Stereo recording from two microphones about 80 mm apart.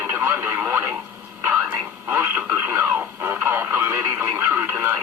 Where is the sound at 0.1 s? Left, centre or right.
Right.